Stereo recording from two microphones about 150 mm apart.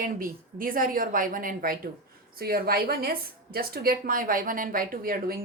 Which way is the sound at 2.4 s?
85° right.